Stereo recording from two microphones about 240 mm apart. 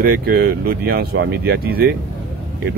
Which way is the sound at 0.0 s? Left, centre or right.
Right.